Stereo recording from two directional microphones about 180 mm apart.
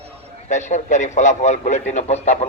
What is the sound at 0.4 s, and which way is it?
A man's voice, 40° left (ahead or behind).